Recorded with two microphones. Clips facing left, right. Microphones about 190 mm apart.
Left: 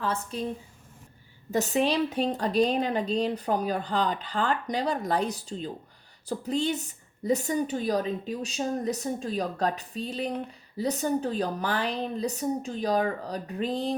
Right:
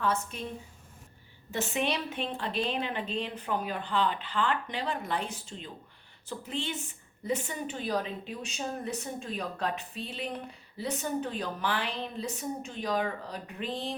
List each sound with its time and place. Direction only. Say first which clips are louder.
0.0 s a woman's voice: left 1 dB; 35° left (ahead or behind)
1.5 s a woman's voice: left 6 dB; 40° left (ahead or behind)